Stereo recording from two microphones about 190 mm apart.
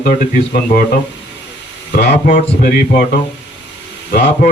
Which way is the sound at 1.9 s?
50° left (ahead or behind).